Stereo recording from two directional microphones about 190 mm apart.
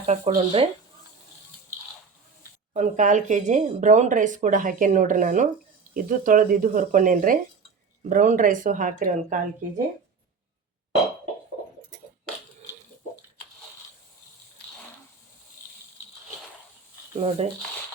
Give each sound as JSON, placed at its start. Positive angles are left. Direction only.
{"t": 0.0, "sound": "speech", "side_deg": -40}
{"t": 2.7, "sound": "a woman's voice", "side_deg": -40}
{"t": 17.2, "sound": "speech", "side_deg": -30}